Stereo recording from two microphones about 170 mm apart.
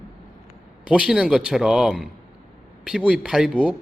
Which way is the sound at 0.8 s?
5° right (ahead or behind).